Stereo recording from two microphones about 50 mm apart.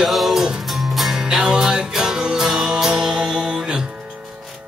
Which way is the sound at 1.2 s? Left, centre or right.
Centre.